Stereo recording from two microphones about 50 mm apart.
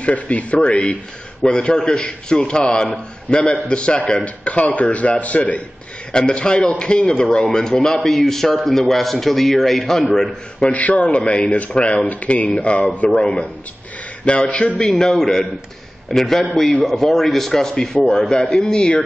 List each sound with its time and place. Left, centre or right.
0.0 s a man's voice: left
6.1 s a man's voice: centre
10.7 s a man's voice: left
14.8 s a man's voice: centre